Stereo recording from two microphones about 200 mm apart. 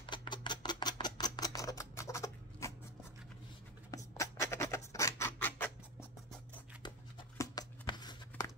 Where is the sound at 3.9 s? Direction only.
15° left (ahead or behind).